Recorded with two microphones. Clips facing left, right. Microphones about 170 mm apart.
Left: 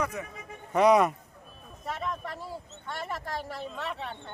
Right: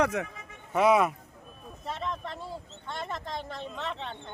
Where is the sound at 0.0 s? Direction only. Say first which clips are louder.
Right 5 dB; 80° right.